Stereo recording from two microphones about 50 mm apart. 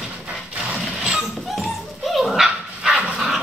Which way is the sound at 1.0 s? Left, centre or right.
Centre.